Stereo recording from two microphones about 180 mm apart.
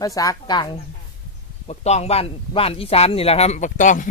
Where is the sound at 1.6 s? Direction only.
40° left (ahead or behind).